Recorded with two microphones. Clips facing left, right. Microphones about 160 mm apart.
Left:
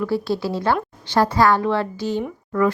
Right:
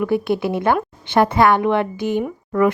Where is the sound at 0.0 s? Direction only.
20° right (ahead or behind).